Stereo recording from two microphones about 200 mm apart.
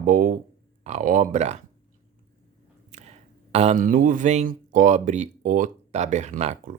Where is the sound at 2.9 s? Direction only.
35° right (ahead or behind).